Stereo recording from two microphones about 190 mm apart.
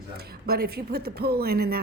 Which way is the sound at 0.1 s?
55° right (ahead or behind).